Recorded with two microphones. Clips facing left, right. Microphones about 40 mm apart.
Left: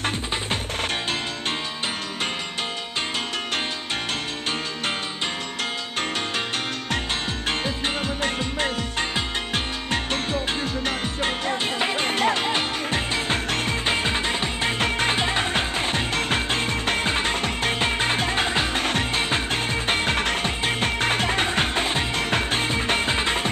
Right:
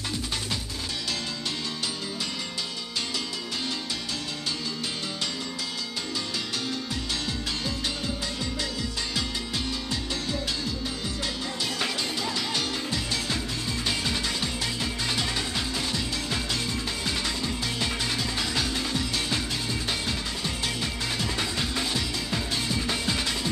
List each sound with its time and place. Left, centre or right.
7.4 s music: left